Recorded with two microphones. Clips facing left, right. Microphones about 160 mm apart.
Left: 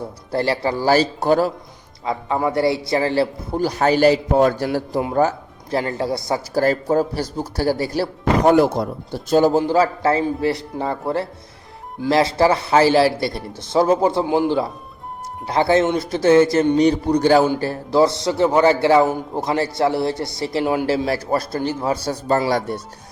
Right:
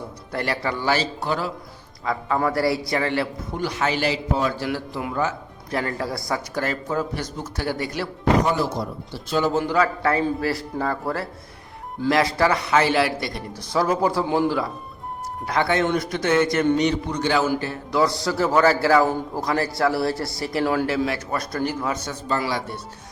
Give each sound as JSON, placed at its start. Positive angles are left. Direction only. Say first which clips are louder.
{"t": 0.3, "sound": "a man's voice", "louder": "left 6 dB", "side_deg": 30}
{"t": 2.1, "sound": "a man's voice", "louder": "left 2 dB", "side_deg": 25}
{"t": 8.4, "sound": "a man's voice", "louder": "left 9 dB", "side_deg": 55}